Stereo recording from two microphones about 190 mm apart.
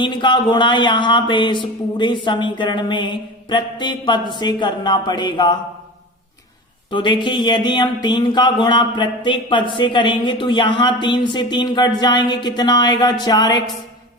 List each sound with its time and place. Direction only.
0.0 s speech: 25° left (ahead or behind)
6.9 s speech: 25° left (ahead or behind)